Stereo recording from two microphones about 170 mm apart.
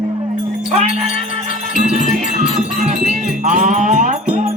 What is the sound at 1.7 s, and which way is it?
Wind chime, 45° right (ahead or behind).